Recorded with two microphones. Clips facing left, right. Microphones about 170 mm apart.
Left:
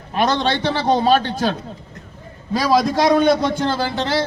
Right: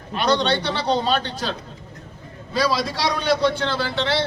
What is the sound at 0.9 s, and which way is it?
Speech, 50° left (ahead or behind).